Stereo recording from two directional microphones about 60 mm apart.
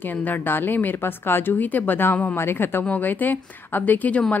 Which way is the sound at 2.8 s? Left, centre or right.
Left.